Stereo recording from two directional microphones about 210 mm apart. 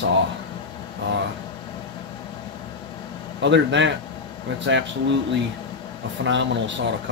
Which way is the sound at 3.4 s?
60° right (ahead or behind).